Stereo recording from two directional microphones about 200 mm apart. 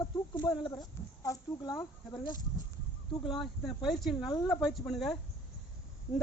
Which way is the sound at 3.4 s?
Centre (ahead or behind).